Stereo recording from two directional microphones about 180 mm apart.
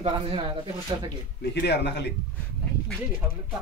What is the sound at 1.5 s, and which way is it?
Speech, 65° left (ahead or behind).